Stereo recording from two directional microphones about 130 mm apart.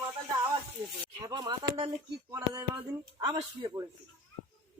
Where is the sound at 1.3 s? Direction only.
30° right (ahead or behind).